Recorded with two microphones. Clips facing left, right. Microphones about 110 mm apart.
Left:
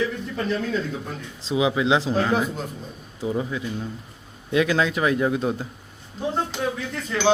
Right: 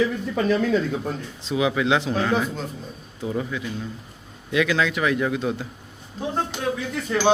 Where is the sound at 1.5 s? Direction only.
20° left (ahead or behind).